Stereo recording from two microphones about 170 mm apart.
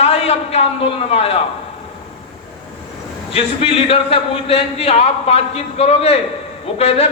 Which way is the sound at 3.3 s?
35° left (ahead or behind).